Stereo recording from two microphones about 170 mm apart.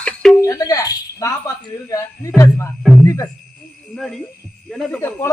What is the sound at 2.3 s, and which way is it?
Speech, 15° left (ahead or behind).